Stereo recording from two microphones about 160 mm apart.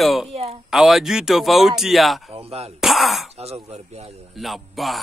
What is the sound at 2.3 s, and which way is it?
Speech, 40° right (ahead or behind).